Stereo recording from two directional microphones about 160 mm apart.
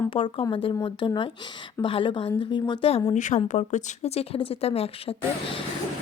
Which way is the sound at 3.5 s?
50° left (ahead or behind).